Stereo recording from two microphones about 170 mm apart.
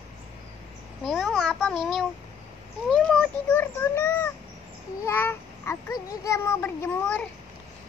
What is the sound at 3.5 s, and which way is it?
A child's voice, 15° left (ahead or behind).